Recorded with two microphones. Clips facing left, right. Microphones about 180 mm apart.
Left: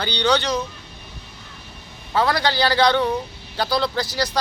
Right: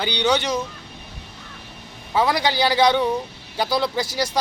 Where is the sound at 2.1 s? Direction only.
15° right (ahead or behind).